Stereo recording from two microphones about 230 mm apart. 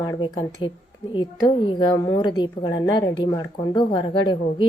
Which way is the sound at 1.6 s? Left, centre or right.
Centre.